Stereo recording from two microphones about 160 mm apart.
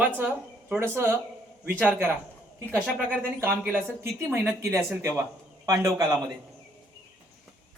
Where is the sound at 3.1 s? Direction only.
10° right (ahead or behind).